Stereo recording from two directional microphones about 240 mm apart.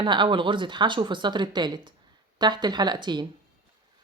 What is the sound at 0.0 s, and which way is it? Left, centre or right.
Speech, centre.